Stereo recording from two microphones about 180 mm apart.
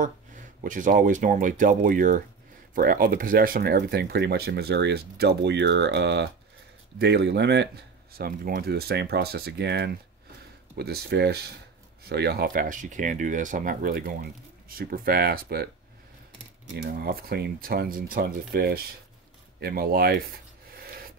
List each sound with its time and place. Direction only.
0.0 s speech: 45° right (ahead or behind)
16.7 s speech: 60° right (ahead or behind)